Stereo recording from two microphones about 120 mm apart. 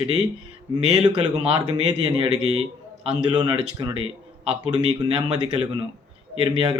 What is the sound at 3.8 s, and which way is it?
Speech, 40° right (ahead or behind).